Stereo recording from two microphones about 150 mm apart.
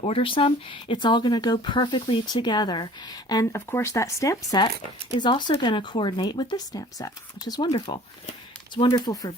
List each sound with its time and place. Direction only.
0.0 s speech: 40° left (ahead or behind)